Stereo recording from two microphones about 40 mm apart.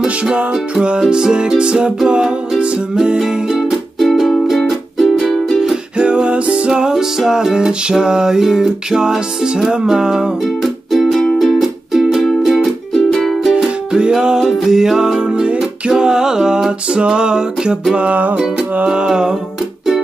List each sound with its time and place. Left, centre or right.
0.0 s music: right
3.2 s music: centre
5.9 s music: right
6.7 s music: centre
10.4 s music: centre
13.6 s music: right
15.1 s music: right
18.3 s music: right